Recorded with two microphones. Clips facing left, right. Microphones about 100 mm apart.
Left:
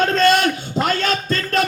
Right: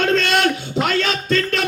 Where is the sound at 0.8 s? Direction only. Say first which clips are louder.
Left 1 dB; 40° left (ahead or behind).